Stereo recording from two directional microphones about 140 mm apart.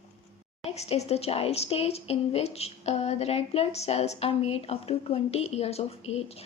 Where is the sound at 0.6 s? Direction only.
50° left (ahead or behind).